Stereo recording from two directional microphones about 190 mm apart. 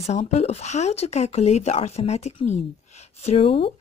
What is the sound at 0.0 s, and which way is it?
Speech, 35° left (ahead or behind).